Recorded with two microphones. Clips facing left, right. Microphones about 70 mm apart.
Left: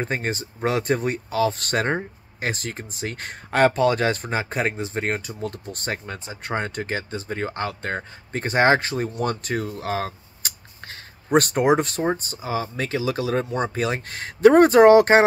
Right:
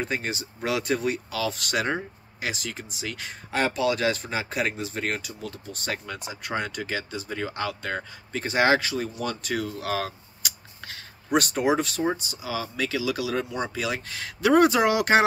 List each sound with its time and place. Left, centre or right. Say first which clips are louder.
0.0 s speech: left 3 dB; left
11.3 s speech: left 5 dB; left